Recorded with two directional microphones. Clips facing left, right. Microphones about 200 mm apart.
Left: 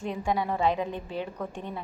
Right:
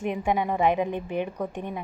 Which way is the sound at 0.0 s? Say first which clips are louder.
Right 3 dB; 20° right (ahead or behind).